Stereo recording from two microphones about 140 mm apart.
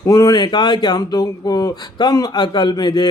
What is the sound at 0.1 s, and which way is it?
Speech, 25° left (ahead or behind).